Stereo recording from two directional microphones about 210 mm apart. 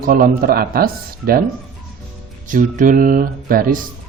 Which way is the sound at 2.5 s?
40° right (ahead or behind).